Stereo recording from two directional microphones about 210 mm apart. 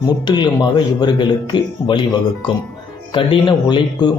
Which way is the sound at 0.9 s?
20° left (ahead or behind).